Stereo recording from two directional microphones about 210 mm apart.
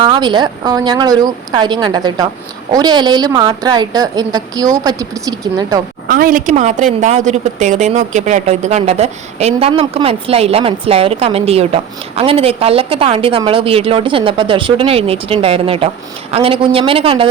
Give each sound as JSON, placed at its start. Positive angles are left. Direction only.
{"t": 0.0, "sound": "a woman's voice", "side_deg": -20}
{"t": 6.1, "sound": "a woman's voice", "side_deg": -40}